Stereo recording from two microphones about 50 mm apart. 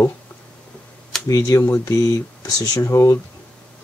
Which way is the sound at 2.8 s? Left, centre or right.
Left.